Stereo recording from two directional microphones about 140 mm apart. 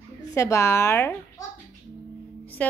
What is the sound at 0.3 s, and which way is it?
Speech, 20° left (ahead or behind).